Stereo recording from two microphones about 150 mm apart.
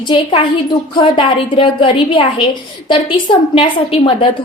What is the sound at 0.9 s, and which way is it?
A woman's voice, 35° left (ahead or behind).